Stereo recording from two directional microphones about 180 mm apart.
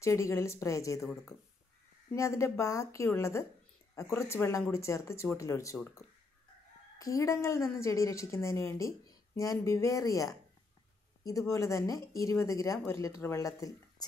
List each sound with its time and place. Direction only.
0.0 s a woman's voice: 15° left (ahead or behind)
2.1 s a woman's voice: 15° left (ahead or behind)
7.0 s a woman's voice: 20° left (ahead or behind)